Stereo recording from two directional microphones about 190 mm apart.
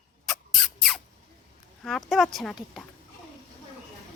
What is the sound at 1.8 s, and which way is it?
Speech, centre (ahead or behind).